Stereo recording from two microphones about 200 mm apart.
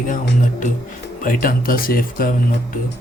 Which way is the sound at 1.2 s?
45° left (ahead or behind).